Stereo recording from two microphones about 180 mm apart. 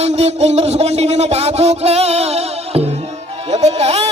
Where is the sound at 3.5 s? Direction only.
35° right (ahead or behind).